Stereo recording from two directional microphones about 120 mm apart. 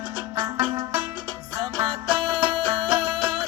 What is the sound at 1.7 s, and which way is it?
Music, 40° right (ahead or behind).